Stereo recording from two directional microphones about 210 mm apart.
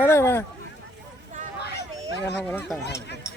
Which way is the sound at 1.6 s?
50° left (ahead or behind).